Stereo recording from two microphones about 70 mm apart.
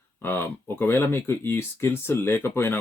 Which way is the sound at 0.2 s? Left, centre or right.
Left.